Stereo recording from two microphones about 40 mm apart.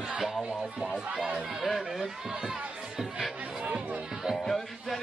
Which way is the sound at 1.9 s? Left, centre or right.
Centre.